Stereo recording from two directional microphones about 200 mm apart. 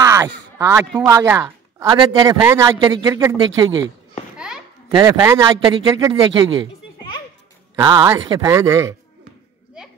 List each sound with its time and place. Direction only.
0.0 s speech: 15° right (ahead or behind)
1.9 s a man's voice: 25° right (ahead or behind)
4.9 s a man's voice: 20° right (ahead or behind)
7.7 s speech: 15° right (ahead or behind)